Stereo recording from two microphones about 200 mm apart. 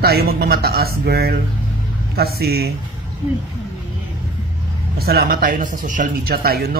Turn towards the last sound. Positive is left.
turn(degrees=-50)  # may be behind; listen again after turning